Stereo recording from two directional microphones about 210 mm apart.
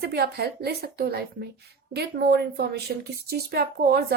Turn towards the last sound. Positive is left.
turn(degrees=-50)  # may be behind; listen again after turning